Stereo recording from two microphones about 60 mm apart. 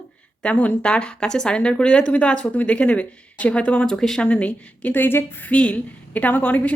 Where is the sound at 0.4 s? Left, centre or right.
Left.